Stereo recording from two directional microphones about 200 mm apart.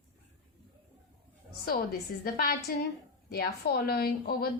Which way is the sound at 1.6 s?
50° left (ahead or behind).